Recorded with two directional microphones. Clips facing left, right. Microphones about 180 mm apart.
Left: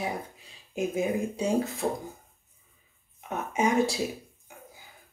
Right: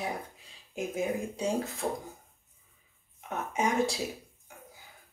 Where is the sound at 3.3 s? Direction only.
5° left (ahead or behind).